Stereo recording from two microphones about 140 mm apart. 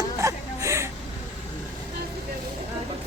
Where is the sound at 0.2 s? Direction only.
20° right (ahead or behind).